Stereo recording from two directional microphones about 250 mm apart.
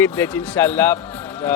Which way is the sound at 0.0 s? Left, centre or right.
Centre.